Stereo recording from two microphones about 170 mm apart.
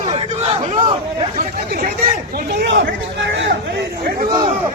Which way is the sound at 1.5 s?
60° right (ahead or behind).